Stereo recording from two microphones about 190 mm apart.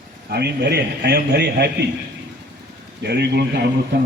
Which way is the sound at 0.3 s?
60° right (ahead or behind).